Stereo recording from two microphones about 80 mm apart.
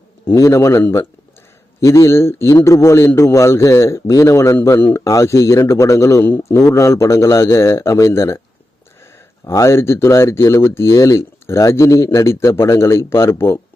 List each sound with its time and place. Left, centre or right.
0.3 s speech: left
9.4 s speech: left